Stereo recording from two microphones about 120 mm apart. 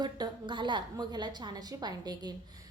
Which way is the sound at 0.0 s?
40° right (ahead or behind).